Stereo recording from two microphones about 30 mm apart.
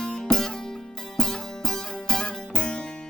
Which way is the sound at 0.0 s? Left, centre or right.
Left.